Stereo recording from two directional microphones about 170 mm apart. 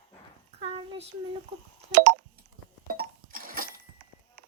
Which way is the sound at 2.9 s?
55° right (ahead or behind).